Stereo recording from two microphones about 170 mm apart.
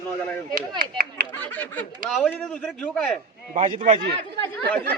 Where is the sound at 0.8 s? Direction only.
60° right (ahead or behind).